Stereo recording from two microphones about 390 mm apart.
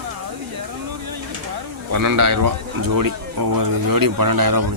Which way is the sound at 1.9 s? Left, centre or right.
Right.